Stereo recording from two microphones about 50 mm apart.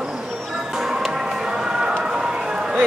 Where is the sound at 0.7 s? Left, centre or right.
Centre.